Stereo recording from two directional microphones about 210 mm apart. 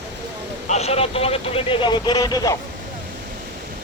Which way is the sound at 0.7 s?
30° left (ahead or behind).